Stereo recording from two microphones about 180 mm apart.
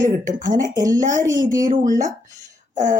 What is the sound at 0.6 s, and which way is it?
Speech, 20° right (ahead or behind).